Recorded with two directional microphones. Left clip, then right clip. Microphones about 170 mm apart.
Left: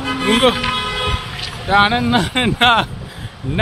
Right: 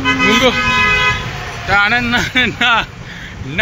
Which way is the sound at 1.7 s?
20° left (ahead or behind).